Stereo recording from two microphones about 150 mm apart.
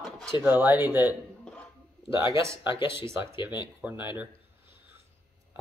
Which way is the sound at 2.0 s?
35° left (ahead or behind).